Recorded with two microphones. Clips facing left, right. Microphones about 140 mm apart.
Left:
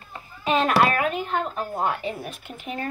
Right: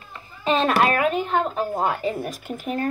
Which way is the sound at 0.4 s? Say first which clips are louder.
Right 1 dB; 30° right (ahead or behind).